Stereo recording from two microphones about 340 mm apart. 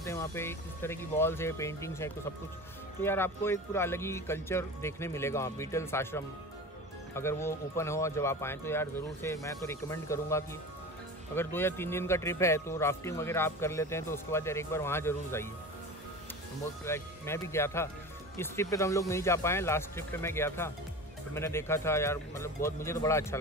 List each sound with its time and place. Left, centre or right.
0.0 s speech: centre
16.8 s speech: centre